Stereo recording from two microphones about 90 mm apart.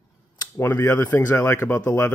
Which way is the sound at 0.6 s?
25° left (ahead or behind).